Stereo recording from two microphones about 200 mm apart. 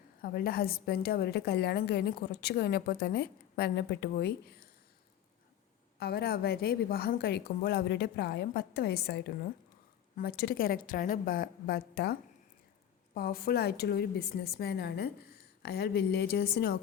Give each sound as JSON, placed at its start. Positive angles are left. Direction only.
{"t": 0.2, "sound": "a woman's voice", "side_deg": 50}
{"t": 6.0, "sound": "a woman's voice", "side_deg": 50}
{"t": 13.1, "sound": "a woman's voice", "side_deg": 45}